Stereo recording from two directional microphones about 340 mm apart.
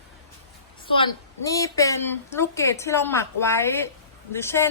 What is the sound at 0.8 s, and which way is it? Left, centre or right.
A woman's voice, centre.